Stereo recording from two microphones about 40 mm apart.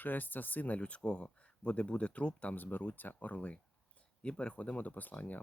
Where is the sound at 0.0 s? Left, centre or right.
Left.